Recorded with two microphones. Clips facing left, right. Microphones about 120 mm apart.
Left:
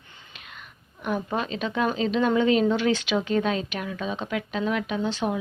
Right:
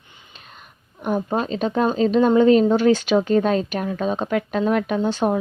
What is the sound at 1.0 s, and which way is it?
Speech, 40° right (ahead or behind).